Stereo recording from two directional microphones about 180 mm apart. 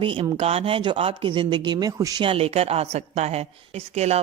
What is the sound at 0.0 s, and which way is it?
Speech, 30° right (ahead or behind).